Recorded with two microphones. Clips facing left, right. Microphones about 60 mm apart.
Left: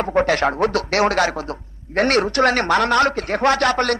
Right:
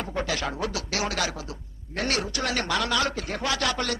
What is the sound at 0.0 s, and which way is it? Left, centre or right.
Speech, left.